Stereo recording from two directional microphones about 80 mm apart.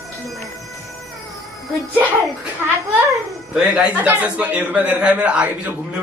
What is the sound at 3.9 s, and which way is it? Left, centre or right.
A man's voice, right.